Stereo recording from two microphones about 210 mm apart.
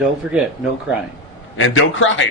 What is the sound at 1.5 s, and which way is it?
Speech, 65° left (ahead or behind).